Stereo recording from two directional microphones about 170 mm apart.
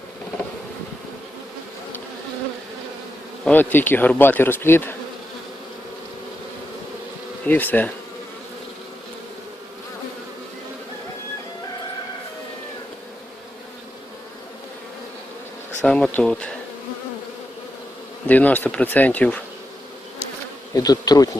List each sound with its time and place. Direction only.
3.4 s bee: 10° left (ahead or behind)
7.4 s bee: 10° left (ahead or behind)
15.8 s speech: 5° left (ahead or behind)
18.3 s bee: 10° left (ahead or behind)
20.7 s bee: 20° left (ahead or behind)